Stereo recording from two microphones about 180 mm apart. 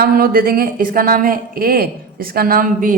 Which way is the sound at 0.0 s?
55° right (ahead or behind).